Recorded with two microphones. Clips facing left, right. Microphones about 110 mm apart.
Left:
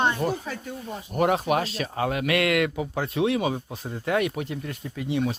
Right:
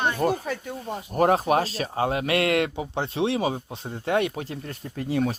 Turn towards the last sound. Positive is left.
turn(degrees=-45)  # may be behind; listen again after turning